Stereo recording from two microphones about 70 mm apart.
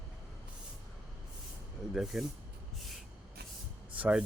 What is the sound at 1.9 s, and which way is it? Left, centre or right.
Speech, centre.